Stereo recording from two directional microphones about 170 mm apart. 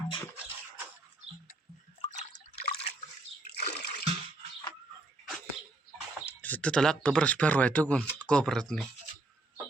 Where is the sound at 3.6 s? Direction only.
70° left (ahead or behind).